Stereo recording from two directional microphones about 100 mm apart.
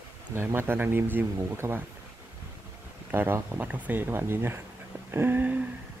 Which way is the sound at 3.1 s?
20° right (ahead or behind).